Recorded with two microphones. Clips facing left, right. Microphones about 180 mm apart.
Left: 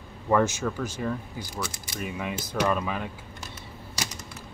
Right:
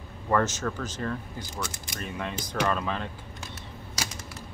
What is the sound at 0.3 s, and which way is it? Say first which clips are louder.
Speech: left 2 dB; 10° left (ahead or behind).